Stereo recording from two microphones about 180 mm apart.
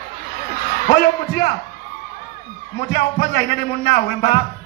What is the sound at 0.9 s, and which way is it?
Speech, 65° left (ahead or behind).